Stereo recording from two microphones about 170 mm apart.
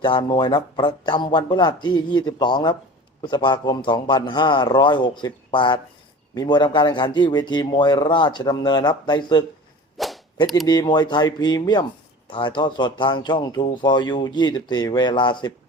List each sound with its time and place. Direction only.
0.0 s speech: 25° left (ahead or behind)
10.0 s whip: centre (ahead or behind)
10.3 s speech: 25° left (ahead or behind)